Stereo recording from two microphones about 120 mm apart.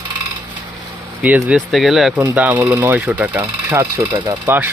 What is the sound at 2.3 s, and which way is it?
Speech, 15° right (ahead or behind).